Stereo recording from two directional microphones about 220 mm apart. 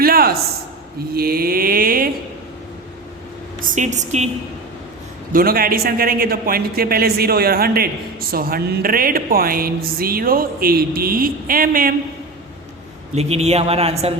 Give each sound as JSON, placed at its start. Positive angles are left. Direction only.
{"t": 0.0, "sound": "a sound", "side_deg": -40}
{"t": 1.1, "sound": "mantra", "side_deg": -45}
{"t": 3.6, "sound": "a man's voice", "side_deg": -35}
{"t": 5.3, "sound": "a man's voice", "side_deg": -40}
{"t": 13.1, "sound": "speech", "side_deg": -30}